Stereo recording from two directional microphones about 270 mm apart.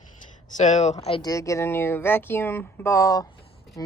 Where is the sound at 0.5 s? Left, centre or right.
Left.